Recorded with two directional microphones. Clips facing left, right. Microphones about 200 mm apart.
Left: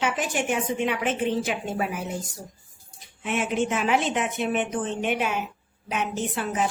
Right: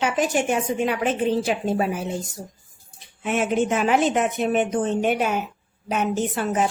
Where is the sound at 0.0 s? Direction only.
40° right (ahead or behind).